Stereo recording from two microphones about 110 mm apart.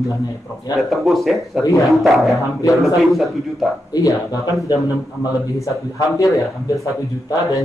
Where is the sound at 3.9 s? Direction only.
35° left (ahead or behind).